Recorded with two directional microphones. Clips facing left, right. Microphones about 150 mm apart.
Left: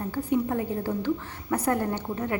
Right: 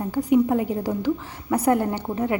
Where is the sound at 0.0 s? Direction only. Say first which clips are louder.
Right 7 dB; 15° right (ahead or behind).